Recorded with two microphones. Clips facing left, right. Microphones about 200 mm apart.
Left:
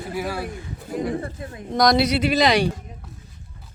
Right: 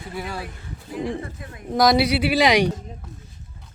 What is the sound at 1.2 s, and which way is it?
Speech, 30° left (ahead or behind).